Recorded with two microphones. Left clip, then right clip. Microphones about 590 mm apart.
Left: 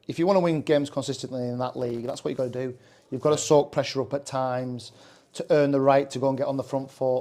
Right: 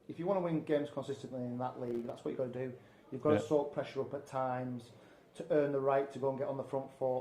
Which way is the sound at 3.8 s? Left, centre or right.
Left.